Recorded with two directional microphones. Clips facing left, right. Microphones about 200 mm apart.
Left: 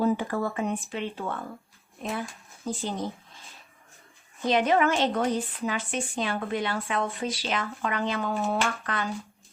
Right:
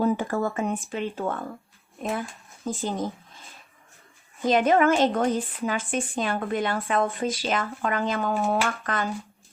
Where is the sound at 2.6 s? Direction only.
50° right (ahead or behind).